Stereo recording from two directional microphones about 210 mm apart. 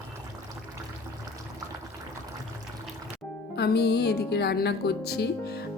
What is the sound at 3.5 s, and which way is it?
Speech, 50° left (ahead or behind).